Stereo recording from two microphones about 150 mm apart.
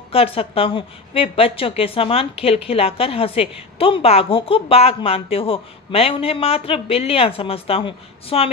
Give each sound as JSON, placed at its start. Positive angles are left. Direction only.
{"t": 0.1, "sound": "a woman's voice", "side_deg": 40}